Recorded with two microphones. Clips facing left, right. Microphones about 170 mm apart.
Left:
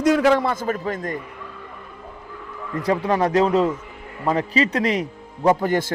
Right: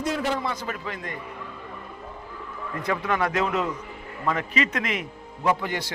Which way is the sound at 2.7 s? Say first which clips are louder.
Left 6 dB; 35° left (ahead or behind).